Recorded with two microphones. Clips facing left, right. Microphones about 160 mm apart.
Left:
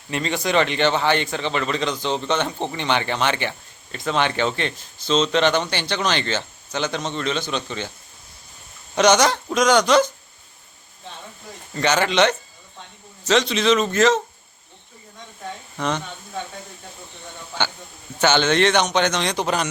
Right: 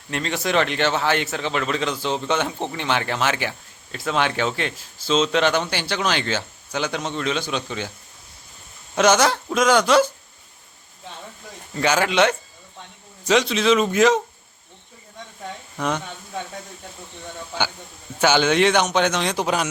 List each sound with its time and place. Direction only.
0.1 s a man's voice: centre (ahead or behind)
9.0 s a man's voice: 5° right (ahead or behind)
11.7 s a man's voice: 5° right (ahead or behind)
15.8 s speech: 10° right (ahead or behind)
18.2 s a man's voice: 10° right (ahead or behind)